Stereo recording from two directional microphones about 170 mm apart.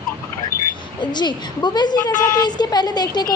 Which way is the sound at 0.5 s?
60° left (ahead or behind).